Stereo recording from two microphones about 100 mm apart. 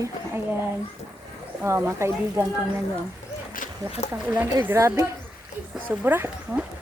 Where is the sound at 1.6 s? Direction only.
25° right (ahead or behind).